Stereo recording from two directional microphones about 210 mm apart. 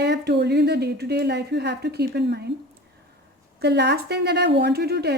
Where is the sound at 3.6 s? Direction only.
50° right (ahead or behind).